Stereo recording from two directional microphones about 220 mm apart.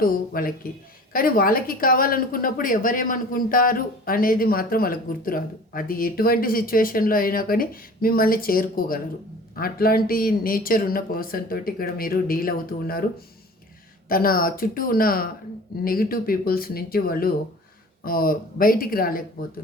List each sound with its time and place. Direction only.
0.0 s a woman's voice: 40° left (ahead or behind)